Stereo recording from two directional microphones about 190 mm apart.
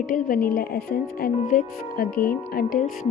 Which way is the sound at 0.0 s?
50° left (ahead or behind).